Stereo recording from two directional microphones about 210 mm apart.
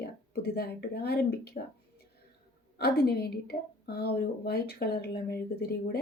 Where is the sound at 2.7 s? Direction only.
50° left (ahead or behind).